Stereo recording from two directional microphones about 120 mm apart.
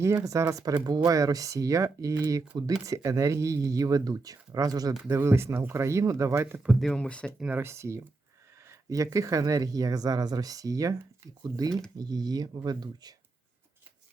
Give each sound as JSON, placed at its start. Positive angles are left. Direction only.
{"t": 0.0, "sound": "speech", "side_deg": -25}
{"t": 6.6, "sound": "speech", "side_deg": 0}
{"t": 7.3, "sound": "speech", "side_deg": -10}
{"t": 7.6, "sound": "speech", "side_deg": -20}